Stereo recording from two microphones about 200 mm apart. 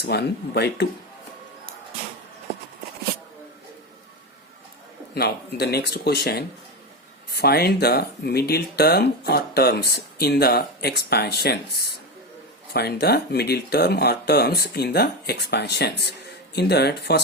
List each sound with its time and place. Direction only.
0.0 s speech: 55° left (ahead or behind)
5.1 s speech: 55° left (ahead or behind)
12.7 s speech: 55° left (ahead or behind)